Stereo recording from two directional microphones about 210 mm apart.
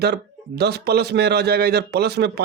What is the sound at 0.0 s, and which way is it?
Speech, 50° right (ahead or behind).